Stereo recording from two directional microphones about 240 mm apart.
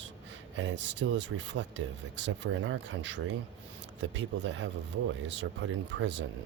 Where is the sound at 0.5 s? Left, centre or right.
Right.